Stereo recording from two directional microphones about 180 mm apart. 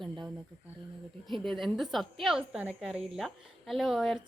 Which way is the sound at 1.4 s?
Centre (ahead or behind).